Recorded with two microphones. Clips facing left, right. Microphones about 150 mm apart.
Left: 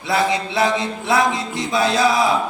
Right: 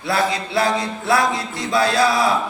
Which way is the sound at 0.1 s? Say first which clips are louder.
Left 1 dB; 20° left (ahead or behind).